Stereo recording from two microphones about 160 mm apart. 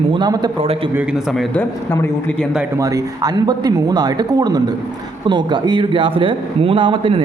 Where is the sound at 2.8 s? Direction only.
20° right (ahead or behind).